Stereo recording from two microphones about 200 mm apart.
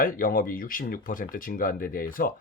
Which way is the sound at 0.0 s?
45° left (ahead or behind).